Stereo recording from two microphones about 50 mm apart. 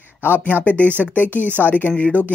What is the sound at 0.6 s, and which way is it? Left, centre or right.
A man's voice, left.